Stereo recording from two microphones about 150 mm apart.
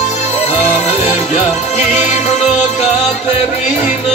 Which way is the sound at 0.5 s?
45° left (ahead or behind).